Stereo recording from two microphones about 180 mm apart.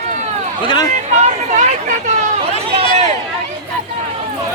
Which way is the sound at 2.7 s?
40° right (ahead or behind).